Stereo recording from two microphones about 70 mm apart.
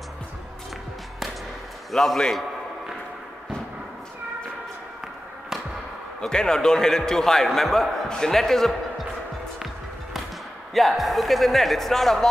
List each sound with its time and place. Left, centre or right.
1.9 s speech: centre
6.2 s a man's voice: centre
10.7 s speech: centre